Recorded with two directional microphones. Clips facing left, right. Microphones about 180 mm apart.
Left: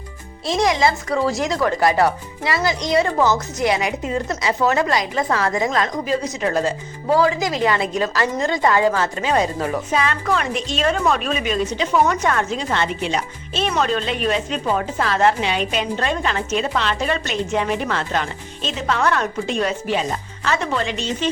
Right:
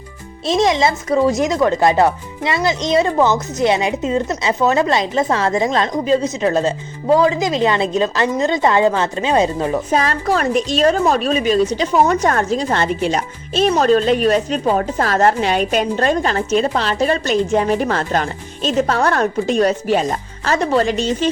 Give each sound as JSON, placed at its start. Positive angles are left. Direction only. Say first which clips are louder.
{"t": 0.4, "sound": "speech", "louder": "right 3 dB", "side_deg": -25}
{"t": 9.9, "sound": "a woman's voice", "louder": "right 3 dB", "side_deg": -40}